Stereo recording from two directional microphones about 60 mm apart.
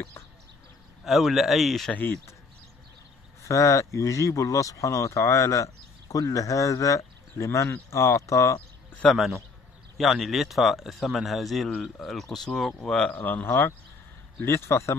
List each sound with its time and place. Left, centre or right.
1.0 s speech: centre
3.4 s speech: left
9.1 s speech: centre
13.1 s speech: left